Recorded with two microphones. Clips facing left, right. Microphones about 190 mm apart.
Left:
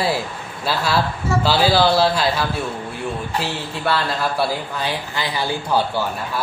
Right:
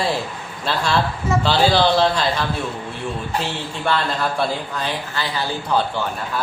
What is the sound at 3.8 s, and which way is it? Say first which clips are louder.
Speech: even; 5° left (ahead or behind).